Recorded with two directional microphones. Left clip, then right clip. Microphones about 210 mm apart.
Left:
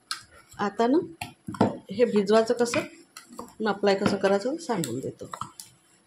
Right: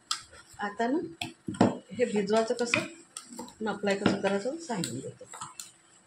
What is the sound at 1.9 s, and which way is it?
Speech, 45° left (ahead or behind).